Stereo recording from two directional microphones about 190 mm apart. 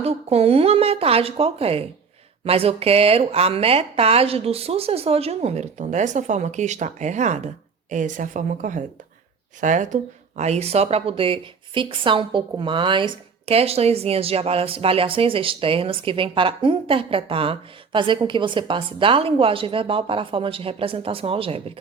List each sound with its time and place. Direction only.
0.0 s speech: 35° right (ahead or behind)